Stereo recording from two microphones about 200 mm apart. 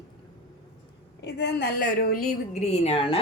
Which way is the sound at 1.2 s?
55° left (ahead or behind).